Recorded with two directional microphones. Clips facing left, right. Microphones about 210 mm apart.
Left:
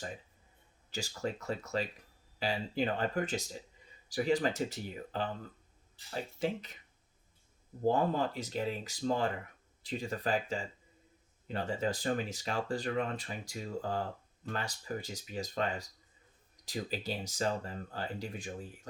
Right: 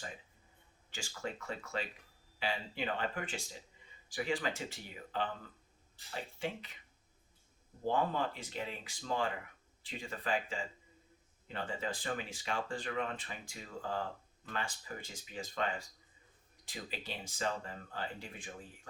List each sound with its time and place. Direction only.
0.9 s speech: 40° left (ahead or behind)
7.9 s speech: 40° left (ahead or behind)